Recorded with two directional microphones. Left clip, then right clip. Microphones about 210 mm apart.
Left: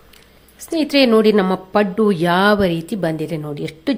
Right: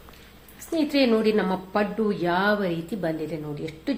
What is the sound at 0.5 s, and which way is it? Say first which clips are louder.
A woman's voice: left 7 dB; 50° left (ahead or behind).